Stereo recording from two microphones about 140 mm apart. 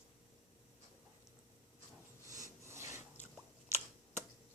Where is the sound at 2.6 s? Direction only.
20° right (ahead or behind).